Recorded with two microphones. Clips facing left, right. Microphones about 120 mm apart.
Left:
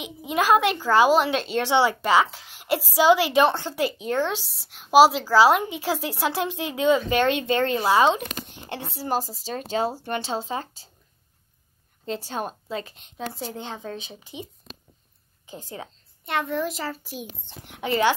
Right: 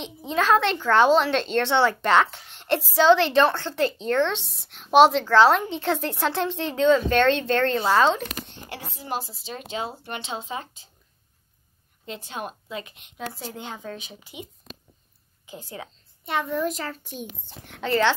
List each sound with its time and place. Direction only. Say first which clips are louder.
0.0 s a woman's voice: even; 10° left (ahead or behind)
8.4 s speech: left 2 dB; 30° left (ahead or behind)
9.0 s speech: left 5 dB; 40° left (ahead or behind)
12.1 s speech: left 4 dB; 35° left (ahead or behind)
16.3 s a child's voice: right 1 dB; centre (ahead or behind)
17.7 s a woman's voice: even; 15° left (ahead or behind)